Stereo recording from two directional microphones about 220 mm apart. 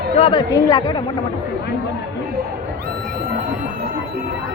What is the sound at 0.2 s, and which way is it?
Speech, 20° left (ahead or behind).